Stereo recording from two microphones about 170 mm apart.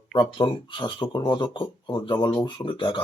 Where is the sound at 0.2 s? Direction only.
30° left (ahead or behind).